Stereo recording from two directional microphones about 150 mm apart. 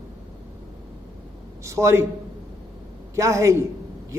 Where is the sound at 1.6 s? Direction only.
20° right (ahead or behind).